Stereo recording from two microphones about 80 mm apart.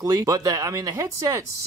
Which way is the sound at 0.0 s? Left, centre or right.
Right.